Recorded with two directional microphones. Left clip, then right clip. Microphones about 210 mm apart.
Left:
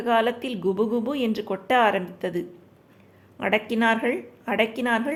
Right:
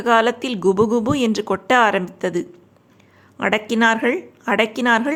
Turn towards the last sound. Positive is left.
turn(degrees=-20)  # may be behind; listen again after turning